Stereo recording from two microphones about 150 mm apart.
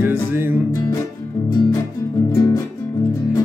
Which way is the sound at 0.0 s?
15° right (ahead or behind).